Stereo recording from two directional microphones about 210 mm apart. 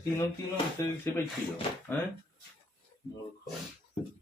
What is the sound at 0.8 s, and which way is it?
Speech, 15° left (ahead or behind).